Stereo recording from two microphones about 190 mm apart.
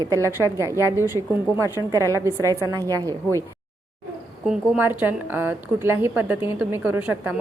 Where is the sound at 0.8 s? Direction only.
15° right (ahead or behind).